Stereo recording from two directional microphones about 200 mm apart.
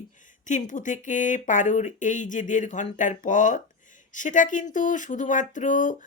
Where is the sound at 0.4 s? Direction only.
40° left (ahead or behind).